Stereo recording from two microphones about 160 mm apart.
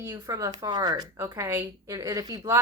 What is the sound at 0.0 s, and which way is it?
A woman's voice, 20° right (ahead or behind).